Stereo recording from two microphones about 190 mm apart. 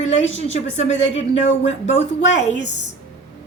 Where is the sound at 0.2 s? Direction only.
80° left.